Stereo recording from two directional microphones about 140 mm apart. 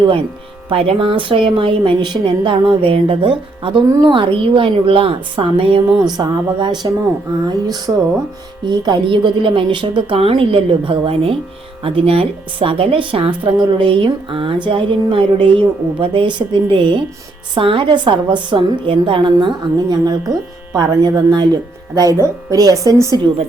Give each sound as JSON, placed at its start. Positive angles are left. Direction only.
{"t": 0.7, "sound": "a woman's voice", "side_deg": -40}